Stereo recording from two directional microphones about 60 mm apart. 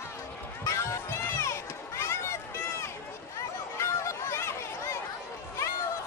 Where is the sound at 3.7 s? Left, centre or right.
Left.